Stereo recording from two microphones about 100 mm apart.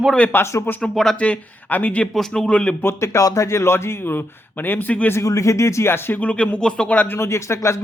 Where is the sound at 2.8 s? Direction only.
25° left (ahead or behind).